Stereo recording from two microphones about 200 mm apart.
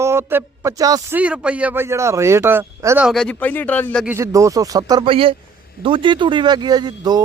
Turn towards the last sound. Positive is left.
turn(degrees=-20)  # may be behind; listen again after turning